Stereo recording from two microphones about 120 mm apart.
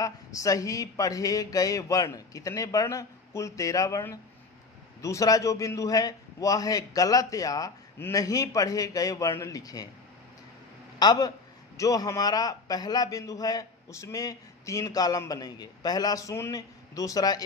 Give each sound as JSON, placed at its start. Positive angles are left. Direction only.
{"t": 0.0, "sound": "speech", "side_deg": 30}
{"t": 11.0, "sound": "a man's voice", "side_deg": 35}